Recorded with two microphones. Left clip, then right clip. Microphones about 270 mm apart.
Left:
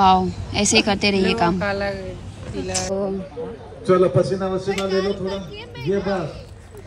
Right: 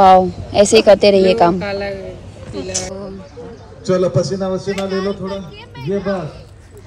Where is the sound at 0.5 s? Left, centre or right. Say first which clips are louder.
Right 10 dB; centre.